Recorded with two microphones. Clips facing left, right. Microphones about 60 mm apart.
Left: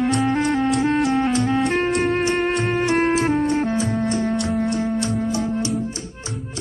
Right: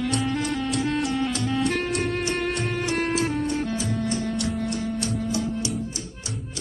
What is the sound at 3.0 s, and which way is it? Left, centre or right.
Music, left.